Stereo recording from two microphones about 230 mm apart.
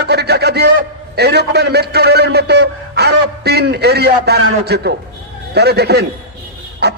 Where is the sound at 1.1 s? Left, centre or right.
Right.